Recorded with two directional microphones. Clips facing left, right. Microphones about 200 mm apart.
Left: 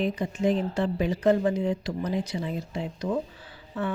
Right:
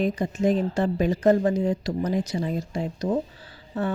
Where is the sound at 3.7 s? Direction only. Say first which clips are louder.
Right 3 dB; 40° right (ahead or behind).